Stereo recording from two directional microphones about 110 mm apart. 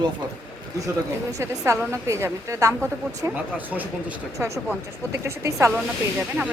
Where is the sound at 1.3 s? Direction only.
30° right (ahead or behind).